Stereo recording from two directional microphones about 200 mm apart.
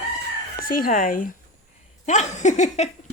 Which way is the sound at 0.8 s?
45° left (ahead or behind).